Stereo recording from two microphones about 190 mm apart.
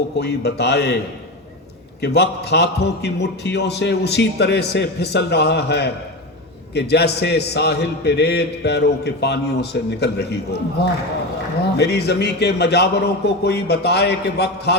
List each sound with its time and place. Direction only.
0.2 s a man's voice: 60° left (ahead or behind)
2.0 s a man's voice: 60° left (ahead or behind)
11.8 s a man's voice: 60° left (ahead or behind)